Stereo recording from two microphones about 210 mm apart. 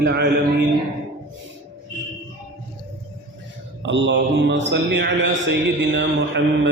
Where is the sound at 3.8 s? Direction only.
60° right (ahead or behind).